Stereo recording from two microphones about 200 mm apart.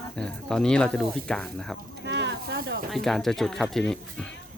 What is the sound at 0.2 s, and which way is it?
Speech, 5° left (ahead or behind).